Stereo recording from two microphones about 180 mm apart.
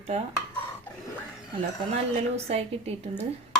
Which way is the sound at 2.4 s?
35° right (ahead or behind).